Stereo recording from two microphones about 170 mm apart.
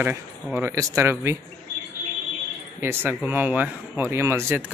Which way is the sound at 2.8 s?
10° right (ahead or behind).